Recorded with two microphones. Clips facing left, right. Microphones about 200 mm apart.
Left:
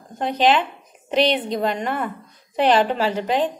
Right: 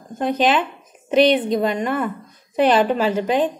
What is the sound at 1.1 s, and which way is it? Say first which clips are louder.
Speech: right 4 dB; 50° right (ahead or behind).